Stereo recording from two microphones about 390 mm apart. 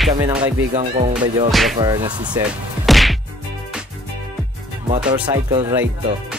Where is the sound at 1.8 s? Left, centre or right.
Centre.